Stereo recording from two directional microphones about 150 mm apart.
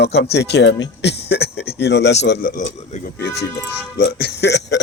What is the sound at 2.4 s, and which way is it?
Speech, 55° left (ahead or behind).